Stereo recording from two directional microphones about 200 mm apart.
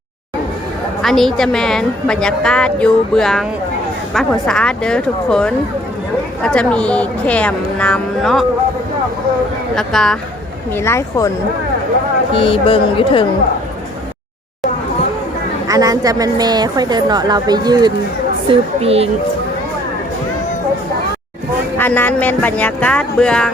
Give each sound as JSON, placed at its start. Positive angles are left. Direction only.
{"t": 1.0, "sound": "a woman's voice", "side_deg": 0}
{"t": 9.7, "sound": "a woman's voice", "side_deg": 5}
{"t": 10.8, "sound": "speech", "side_deg": 15}
{"t": 12.3, "sound": "speech", "side_deg": 25}
{"t": 15.6, "sound": "a woman's voice", "side_deg": -20}
{"t": 21.8, "sound": "speech", "side_deg": 10}